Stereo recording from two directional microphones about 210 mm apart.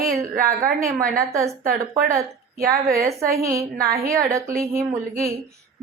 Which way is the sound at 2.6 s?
45° right (ahead or behind).